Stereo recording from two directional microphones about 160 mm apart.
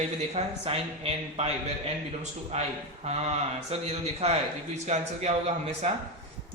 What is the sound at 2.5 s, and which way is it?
A man's voice, 40° right (ahead or behind).